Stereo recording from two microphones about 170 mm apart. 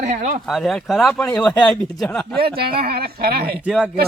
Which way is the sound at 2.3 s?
65° right (ahead or behind).